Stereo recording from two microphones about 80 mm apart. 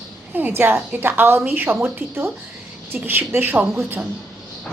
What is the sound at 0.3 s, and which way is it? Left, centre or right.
A woman's voice, right.